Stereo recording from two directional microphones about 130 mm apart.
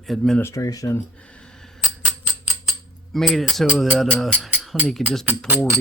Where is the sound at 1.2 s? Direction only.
10° left (ahead or behind).